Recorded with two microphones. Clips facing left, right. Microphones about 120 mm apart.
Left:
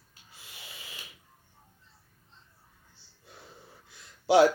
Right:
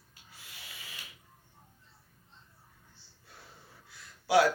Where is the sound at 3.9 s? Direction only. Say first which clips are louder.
Left 5 dB; 25° left (ahead or behind).